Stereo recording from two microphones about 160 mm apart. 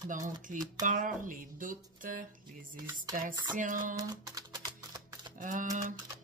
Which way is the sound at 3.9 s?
25° right (ahead or behind).